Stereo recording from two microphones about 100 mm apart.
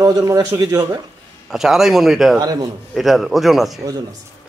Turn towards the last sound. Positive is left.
turn(degrees=0)  # may be behind; listen again after turning